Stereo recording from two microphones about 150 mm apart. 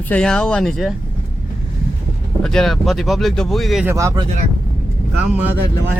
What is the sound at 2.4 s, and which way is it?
Speech, 5° left (ahead or behind).